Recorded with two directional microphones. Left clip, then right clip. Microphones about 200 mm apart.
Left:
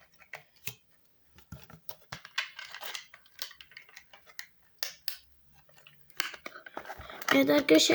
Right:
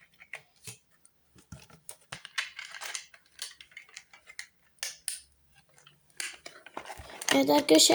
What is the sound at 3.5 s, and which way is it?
Tick-tock, 15° left (ahead or behind).